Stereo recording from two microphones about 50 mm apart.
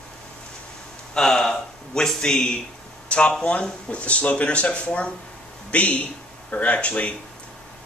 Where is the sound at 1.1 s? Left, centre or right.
Centre.